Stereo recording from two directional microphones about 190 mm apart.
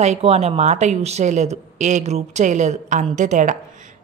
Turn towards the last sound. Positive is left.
turn(degrees=-40)  # may be behind; listen again after turning